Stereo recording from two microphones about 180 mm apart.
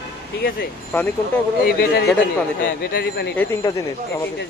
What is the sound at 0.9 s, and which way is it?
Speech, 10° left (ahead or behind).